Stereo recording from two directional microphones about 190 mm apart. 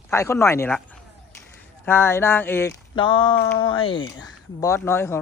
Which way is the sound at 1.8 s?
10° left (ahead or behind).